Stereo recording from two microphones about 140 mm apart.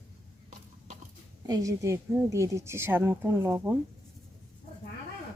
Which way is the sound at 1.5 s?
25° right (ahead or behind).